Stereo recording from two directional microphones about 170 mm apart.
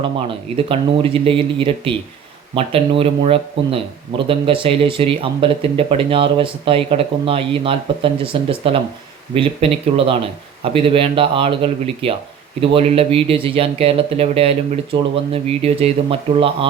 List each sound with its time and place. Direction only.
0.0 s speech: 30° right (ahead or behind)